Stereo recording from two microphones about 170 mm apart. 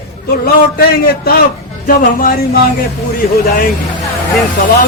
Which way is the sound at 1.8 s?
55° left (ahead or behind).